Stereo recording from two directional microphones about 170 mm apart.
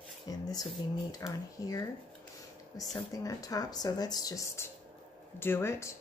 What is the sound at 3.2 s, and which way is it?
Speech, 20° left (ahead or behind).